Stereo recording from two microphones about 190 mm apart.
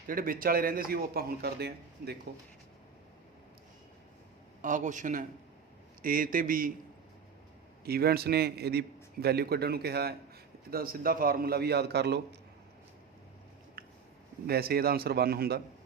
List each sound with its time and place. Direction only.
0.1 s a man's voice: 50° right (ahead or behind)
4.6 s a man's voice: 40° right (ahead or behind)
7.9 s a man's voice: 55° right (ahead or behind)
13.8 s a sound: 50° right (ahead or behind)
14.4 s a man's voice: 55° right (ahead or behind)